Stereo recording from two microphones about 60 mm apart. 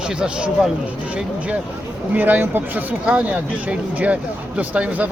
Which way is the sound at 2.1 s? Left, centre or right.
Right.